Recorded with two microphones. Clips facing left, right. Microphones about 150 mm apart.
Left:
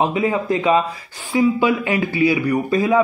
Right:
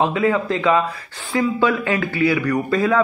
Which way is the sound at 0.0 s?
15° left (ahead or behind).